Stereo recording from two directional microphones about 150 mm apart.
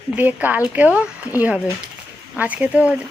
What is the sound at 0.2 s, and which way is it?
Speech, 10° right (ahead or behind).